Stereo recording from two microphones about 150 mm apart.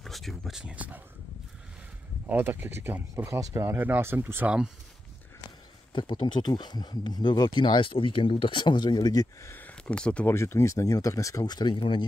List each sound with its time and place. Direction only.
0.0 s speech: centre (ahead or behind)
2.2 s speech: 15° right (ahead or behind)
5.9 s speech: 30° left (ahead or behind)